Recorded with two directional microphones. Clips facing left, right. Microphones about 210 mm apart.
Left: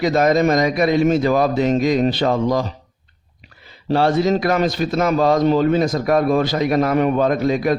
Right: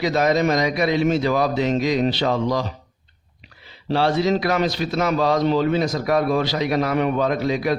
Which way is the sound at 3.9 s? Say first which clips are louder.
Left 3 dB; 45° left (ahead or behind).